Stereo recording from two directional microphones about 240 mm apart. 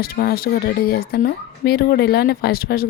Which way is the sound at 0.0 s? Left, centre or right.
Left.